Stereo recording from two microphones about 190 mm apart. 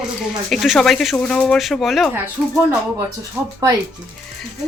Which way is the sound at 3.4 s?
15° right (ahead or behind).